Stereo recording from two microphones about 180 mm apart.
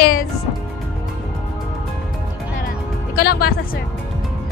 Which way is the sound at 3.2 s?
60° left (ahead or behind).